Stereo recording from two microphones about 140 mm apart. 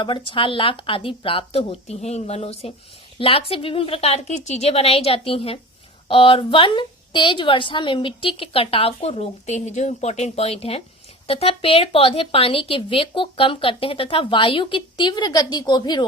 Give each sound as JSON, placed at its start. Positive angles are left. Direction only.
{"t": 0.0, "sound": "a woman's voice", "side_deg": 35}